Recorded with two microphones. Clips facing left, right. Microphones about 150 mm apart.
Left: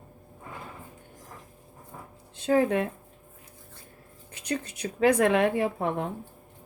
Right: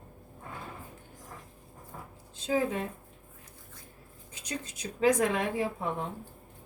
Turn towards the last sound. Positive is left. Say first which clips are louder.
# left 5 dB
turn(degrees=65)  # may be behind; listen again after turning